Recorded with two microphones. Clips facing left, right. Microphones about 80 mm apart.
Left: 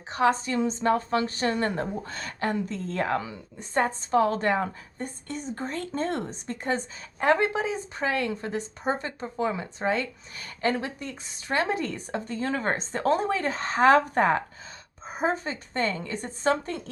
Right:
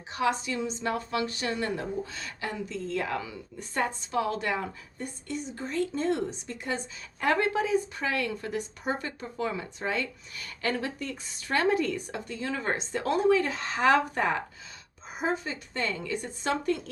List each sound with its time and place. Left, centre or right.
0.1 s a woman's voice: left
7.2 s a woman's voice: left